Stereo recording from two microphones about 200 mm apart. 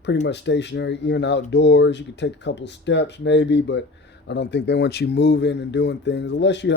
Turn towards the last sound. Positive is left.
turn(degrees=60)  # may be behind; listen again after turning